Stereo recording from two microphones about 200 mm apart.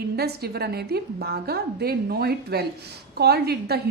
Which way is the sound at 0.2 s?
55° right (ahead or behind).